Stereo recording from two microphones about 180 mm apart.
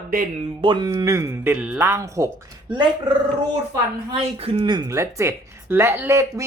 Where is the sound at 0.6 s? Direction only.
25° right (ahead or behind).